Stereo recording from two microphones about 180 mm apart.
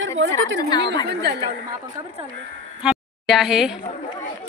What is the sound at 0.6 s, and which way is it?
Speech, 20° left (ahead or behind).